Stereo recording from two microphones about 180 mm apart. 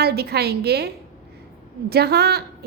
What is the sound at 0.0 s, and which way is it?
A woman's voice, 60° right (ahead or behind).